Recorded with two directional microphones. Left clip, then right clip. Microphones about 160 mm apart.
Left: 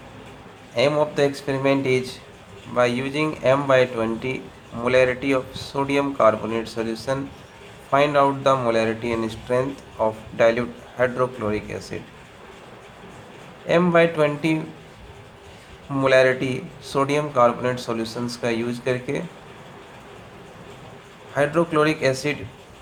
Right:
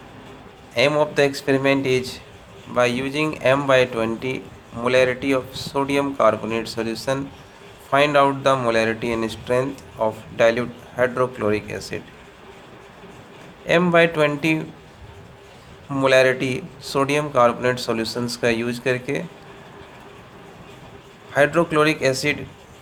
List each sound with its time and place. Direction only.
0.7 s speech: 40° right (ahead or behind)
13.7 s speech: 40° right (ahead or behind)
15.9 s speech: 40° right (ahead or behind)
21.3 s speech: 40° right (ahead or behind)